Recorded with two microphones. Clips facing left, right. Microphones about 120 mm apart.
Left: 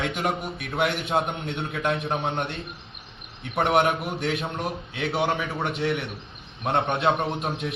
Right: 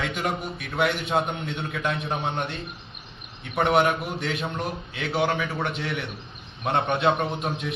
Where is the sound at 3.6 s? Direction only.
Centre (ahead or behind).